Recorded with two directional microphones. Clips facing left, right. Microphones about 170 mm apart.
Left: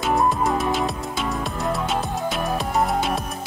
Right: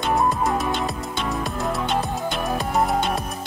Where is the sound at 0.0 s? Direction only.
Centre (ahead or behind).